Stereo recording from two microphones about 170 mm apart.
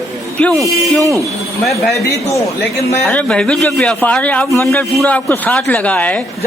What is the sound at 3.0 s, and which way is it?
A man's voice, 5° left (ahead or behind).